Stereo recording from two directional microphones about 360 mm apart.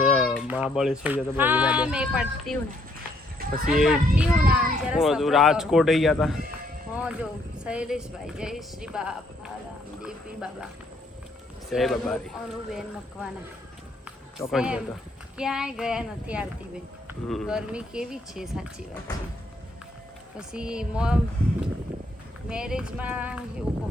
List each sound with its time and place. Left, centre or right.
0.0 s speech: centre
3.3 s a sound: right
3.7 s speech: centre
11.7 s speech: centre
14.3 s speech: centre
20.3 s speech: centre
22.4 s speech: centre